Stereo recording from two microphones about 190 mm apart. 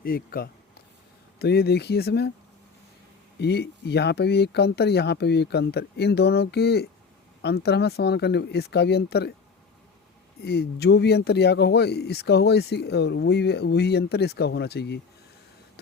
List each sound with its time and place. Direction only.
0.0 s speech: 50° left (ahead or behind)
3.3 s speech: 60° left (ahead or behind)
10.4 s speech: 60° left (ahead or behind)